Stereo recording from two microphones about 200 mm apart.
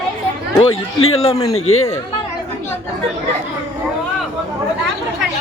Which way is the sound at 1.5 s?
90° left.